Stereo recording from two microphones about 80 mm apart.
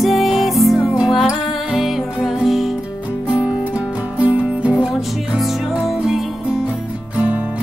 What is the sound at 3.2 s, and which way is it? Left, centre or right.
Music, centre.